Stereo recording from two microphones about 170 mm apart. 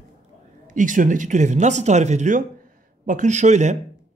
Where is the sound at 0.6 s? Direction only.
50° right (ahead or behind).